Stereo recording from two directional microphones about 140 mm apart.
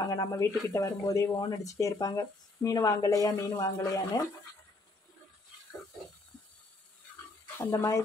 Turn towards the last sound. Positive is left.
turn(degrees=25)  # may be behind; listen again after turning